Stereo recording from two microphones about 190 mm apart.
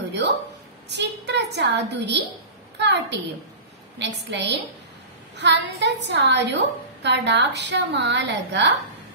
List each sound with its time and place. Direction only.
0.8 s a woman's voice: 65° right (ahead or behind)